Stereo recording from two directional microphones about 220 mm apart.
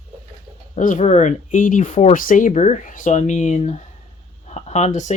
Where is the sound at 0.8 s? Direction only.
35° left (ahead or behind).